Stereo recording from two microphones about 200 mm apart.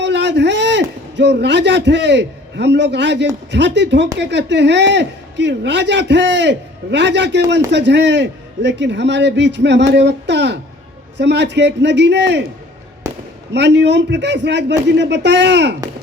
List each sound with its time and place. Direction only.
0.0 s a man's voice: 60° right (ahead or behind)
13.5 s a man's voice: 60° right (ahead or behind)